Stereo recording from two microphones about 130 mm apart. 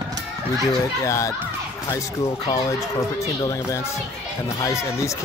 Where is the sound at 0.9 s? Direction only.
25° left (ahead or behind).